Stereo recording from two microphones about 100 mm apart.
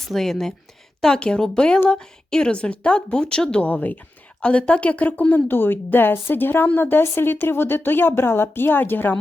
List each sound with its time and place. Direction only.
0.1 s a woman's voice: 5° left (ahead or behind); by 9.1 s 20° left (ahead or behind)